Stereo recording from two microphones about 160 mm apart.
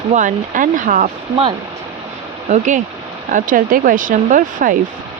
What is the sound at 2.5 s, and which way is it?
Speech, 50° right (ahead or behind).